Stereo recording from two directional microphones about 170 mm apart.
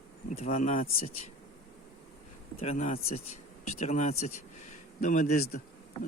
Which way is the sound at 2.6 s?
40° left (ahead or behind).